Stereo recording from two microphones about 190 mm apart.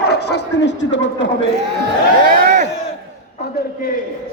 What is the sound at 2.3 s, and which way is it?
Speech, 50° right (ahead or behind).